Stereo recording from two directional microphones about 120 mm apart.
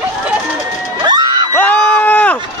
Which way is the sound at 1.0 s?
35° right (ahead or behind).